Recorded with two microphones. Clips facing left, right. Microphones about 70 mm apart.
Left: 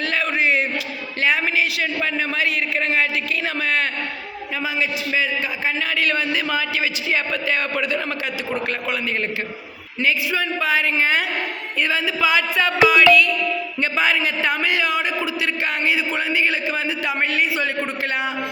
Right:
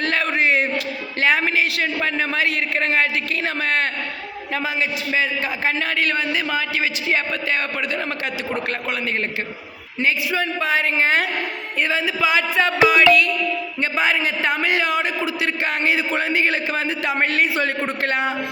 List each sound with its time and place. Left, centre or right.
0.0 s a sound: right
1.2 s a woman's voice: right
6.0 s a woman's voice: right
10.0 s a woman's voice: right
11.8 s a woman's voice: right